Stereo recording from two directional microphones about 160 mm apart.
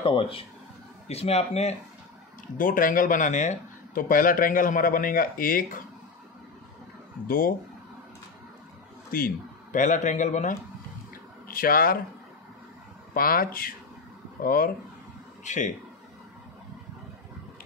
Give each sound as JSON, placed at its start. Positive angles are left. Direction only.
{"t": 0.0, "sound": "speech", "side_deg": 35}
{"t": 2.5, "sound": "speech", "side_deg": 60}
{"t": 7.2, "sound": "speech", "side_deg": 65}
{"t": 9.1, "sound": "a man's voice", "side_deg": 60}
{"t": 11.4, "sound": "speech", "side_deg": 65}
{"t": 13.1, "sound": "speech", "side_deg": 65}
{"t": 15.4, "sound": "speech", "side_deg": 50}